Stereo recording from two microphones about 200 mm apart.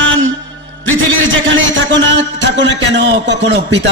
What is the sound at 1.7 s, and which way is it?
A man's voice, 65° right (ahead or behind).